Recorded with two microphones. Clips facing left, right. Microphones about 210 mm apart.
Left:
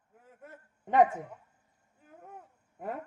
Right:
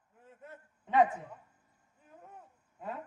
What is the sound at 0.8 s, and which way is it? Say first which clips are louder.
Speech: left 3 dB; 50° left (ahead or behind).